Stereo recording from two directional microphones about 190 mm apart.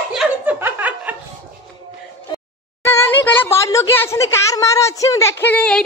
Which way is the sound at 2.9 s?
10° left (ahead or behind).